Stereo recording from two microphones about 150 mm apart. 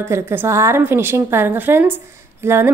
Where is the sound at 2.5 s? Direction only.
15° right (ahead or behind).